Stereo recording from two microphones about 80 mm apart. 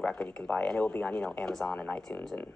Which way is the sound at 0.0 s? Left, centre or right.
Centre.